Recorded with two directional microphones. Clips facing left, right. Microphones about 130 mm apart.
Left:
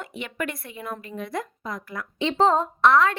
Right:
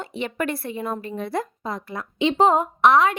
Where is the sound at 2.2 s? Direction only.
15° right (ahead or behind).